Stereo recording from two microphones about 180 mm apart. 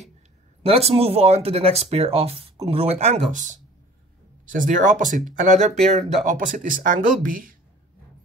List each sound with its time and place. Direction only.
0.7 s speech: 35° right (ahead or behind); by 7.5 s 50° right (ahead or behind)